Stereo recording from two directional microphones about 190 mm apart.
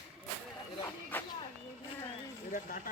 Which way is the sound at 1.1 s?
10° left (ahead or behind).